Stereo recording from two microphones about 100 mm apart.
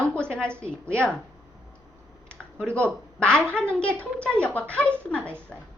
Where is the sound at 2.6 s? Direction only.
25° right (ahead or behind).